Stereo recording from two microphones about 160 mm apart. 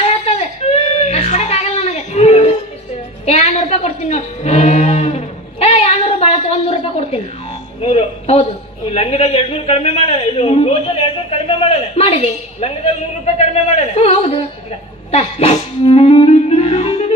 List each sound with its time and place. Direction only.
0.0 s child singing: 40° left (ahead or behind)
3.2 s music: 45° left (ahead or behind)
7.9 s a woman's voice: 40° left (ahead or behind)
15.1 s clarinet: 40° left (ahead or behind)